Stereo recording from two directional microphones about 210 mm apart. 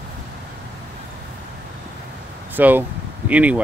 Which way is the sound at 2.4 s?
10° right (ahead or behind).